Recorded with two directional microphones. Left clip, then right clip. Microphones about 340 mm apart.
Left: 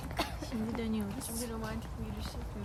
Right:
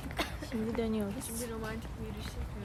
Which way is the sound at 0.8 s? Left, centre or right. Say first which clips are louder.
Right 3 dB; centre.